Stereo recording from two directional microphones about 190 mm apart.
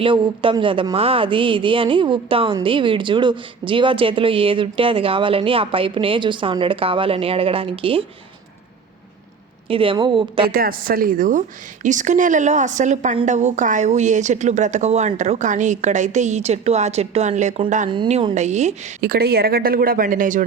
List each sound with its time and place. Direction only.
0.0 s speech: 25° right (ahead or behind)
9.6 s speech: 30° right (ahead or behind)
10.4 s a woman's voice: 50° right (ahead or behind)
17.8 s a woman's voice: 25° right (ahead or behind)
19.0 s speech: 55° right (ahead or behind)